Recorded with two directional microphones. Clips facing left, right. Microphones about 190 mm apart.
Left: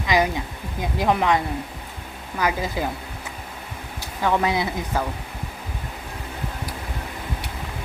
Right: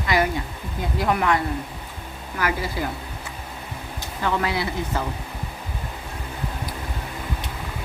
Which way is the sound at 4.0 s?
15° left (ahead or behind).